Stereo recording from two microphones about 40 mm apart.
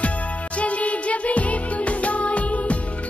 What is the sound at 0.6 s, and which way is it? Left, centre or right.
Music, left.